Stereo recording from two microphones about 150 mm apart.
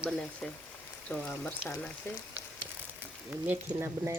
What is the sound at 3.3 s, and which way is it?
Speech, 10° right (ahead or behind).